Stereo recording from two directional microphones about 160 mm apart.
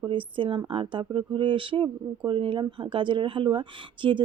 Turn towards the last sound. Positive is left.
turn(degrees=-30)  # may be behind; listen again after turning